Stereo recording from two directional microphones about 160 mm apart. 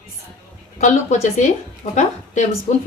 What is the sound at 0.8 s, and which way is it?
A woman's voice, 50° left (ahead or behind).